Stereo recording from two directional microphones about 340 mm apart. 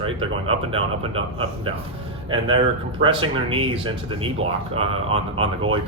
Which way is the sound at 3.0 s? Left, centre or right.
Centre.